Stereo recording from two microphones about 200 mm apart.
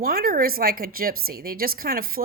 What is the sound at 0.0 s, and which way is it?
A woman's voice, 50° right (ahead or behind).